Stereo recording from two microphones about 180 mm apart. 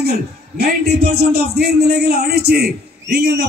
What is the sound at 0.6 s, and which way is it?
A man's voice, 60° right (ahead or behind).